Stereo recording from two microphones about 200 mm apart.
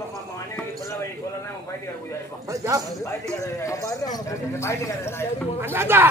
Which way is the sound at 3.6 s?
15° left (ahead or behind).